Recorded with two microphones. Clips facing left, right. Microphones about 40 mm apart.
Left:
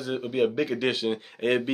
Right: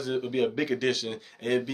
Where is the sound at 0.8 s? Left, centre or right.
Left.